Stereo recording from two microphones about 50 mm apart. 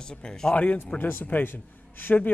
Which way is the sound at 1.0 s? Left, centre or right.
Left.